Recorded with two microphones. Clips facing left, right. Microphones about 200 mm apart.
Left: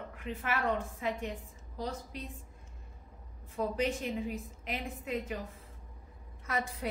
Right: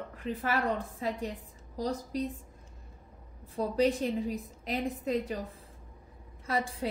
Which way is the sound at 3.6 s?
35° right (ahead or behind).